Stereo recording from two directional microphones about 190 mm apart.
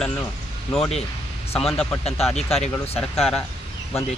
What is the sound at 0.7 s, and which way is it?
Speech, centre (ahead or behind).